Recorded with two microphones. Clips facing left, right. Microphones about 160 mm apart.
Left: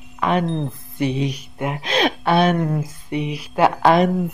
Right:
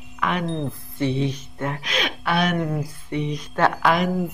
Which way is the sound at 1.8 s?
30° left (ahead or behind).